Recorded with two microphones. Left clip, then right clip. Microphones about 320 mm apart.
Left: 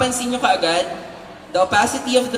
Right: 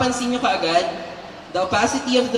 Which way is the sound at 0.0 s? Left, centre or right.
Left.